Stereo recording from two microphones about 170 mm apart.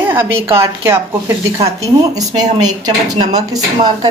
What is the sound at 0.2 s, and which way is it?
Speech, 30° right (ahead or behind).